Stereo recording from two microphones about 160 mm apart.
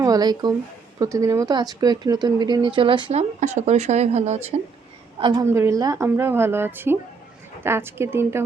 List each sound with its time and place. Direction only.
0.0 s speech: 25° right (ahead or behind)
3.1 s speech: 45° right (ahead or behind)
5.2 s speech: 25° right (ahead or behind)